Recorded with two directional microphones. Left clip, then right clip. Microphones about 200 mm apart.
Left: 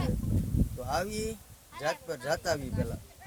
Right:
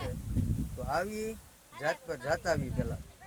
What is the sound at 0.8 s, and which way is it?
Speech, 5° left (ahead or behind).